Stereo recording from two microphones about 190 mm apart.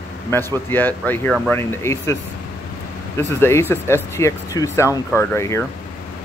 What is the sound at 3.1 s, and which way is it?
Speech, 10° left (ahead or behind).